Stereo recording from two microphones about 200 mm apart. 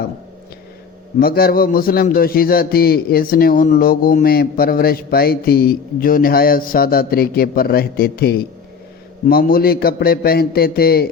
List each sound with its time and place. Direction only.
1.2 s a man's voice: 50° left (ahead or behind)